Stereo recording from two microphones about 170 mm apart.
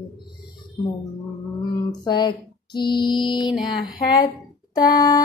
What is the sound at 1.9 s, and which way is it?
Female singing, 25° left (ahead or behind).